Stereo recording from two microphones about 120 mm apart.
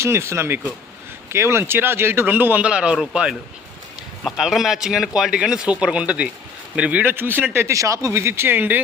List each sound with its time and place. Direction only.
0.0 s a man's voice: 20° right (ahead or behind)